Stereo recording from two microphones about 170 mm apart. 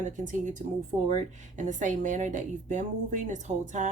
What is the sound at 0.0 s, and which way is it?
Speech, 45° right (ahead or behind).